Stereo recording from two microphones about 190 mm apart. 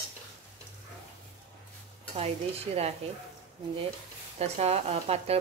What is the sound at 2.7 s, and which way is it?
Speech, 30° right (ahead or behind).